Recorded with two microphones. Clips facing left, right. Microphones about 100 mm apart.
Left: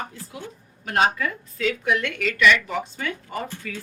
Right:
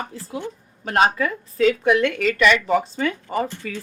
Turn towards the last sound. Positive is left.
turn(degrees=-30)  # may be behind; listen again after turning